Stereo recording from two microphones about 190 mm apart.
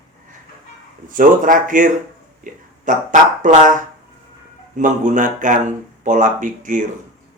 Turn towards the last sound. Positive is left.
turn(degrees=-40)  # may be behind; listen again after turning